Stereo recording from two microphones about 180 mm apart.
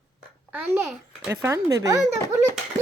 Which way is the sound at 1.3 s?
15° right (ahead or behind).